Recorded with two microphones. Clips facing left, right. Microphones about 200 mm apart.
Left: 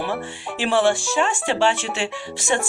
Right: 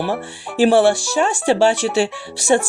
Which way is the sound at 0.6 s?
40° right (ahead or behind).